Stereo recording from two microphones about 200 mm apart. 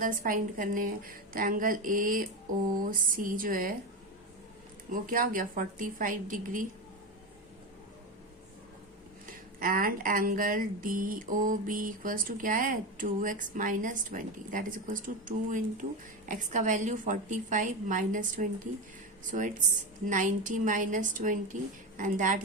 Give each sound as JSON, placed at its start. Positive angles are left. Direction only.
{"t": 0.0, "sound": "speech", "side_deg": -45}
{"t": 4.9, "sound": "speech", "side_deg": -45}
{"t": 9.2, "sound": "a woman's voice", "side_deg": -45}